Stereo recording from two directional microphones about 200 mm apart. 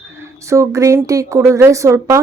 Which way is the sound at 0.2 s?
15° right (ahead or behind).